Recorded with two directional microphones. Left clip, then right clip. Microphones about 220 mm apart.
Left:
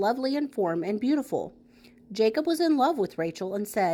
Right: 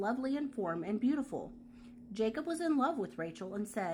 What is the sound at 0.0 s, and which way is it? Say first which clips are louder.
Speech: left 10 dB; 30° left (ahead or behind).